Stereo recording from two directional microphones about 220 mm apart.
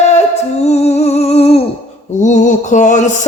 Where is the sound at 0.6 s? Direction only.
30° left (ahead or behind).